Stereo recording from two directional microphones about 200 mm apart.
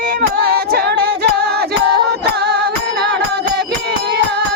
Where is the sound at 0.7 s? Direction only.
55° right (ahead or behind).